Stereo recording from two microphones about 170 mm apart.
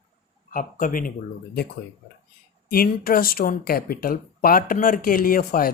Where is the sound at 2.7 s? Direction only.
60° left (ahead or behind).